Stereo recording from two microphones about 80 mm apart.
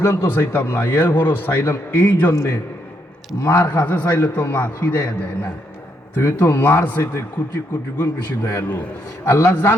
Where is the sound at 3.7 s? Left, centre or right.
Left.